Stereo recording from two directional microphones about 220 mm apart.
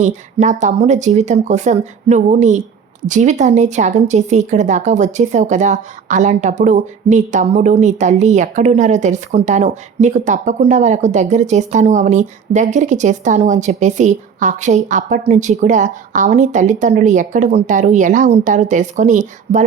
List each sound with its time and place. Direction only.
0.0 s speech: 35° right (ahead or behind)